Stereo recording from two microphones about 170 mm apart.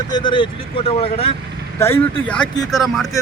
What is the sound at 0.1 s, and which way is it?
Speech, 25° left (ahead or behind).